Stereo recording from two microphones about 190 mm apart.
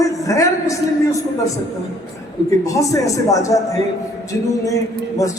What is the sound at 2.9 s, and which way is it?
Speech, 15° left (ahead or behind).